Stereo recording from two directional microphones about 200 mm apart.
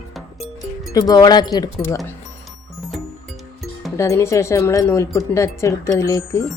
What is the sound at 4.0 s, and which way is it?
Speech, 15° left (ahead or behind).